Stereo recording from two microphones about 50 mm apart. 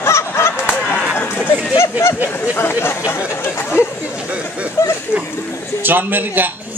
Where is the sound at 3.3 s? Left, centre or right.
Left.